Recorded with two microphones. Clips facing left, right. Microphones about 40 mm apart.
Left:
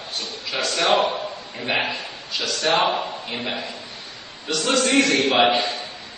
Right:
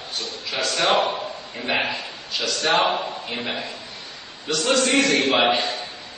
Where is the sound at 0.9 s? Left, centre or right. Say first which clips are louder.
Left 1 dB; right.